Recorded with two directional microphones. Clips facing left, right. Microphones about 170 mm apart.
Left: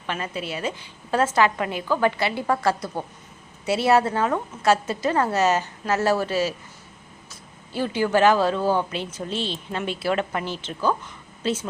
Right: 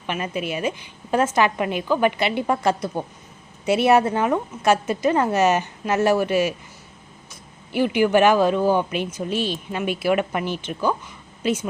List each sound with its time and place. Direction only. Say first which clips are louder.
0.1 s a woman's voice: right 3 dB; 15° right (ahead or behind)
7.7 s a woman's voice: right 4 dB; 15° right (ahead or behind)